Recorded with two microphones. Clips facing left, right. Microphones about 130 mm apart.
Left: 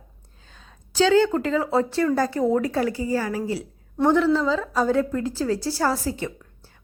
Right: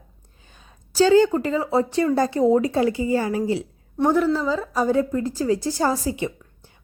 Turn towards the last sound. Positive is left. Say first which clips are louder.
# right 2 dB
turn(degrees=-15)  # may be behind; listen again after turning